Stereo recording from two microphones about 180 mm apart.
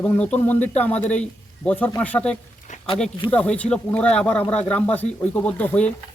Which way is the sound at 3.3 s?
10° left (ahead or behind).